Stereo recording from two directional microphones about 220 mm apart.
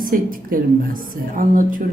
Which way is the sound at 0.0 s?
40° right (ahead or behind).